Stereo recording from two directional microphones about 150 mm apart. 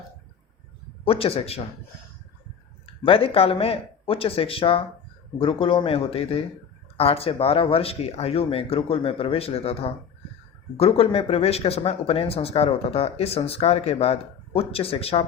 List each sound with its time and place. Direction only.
1.0 s speech: 40° left (ahead or behind)
2.8 s speech: 35° left (ahead or behind)